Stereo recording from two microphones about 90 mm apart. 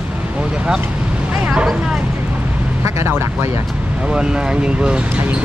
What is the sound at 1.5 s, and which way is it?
Speech, 10° right (ahead or behind).